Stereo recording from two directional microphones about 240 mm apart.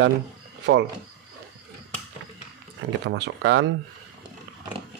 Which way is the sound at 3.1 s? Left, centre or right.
Right.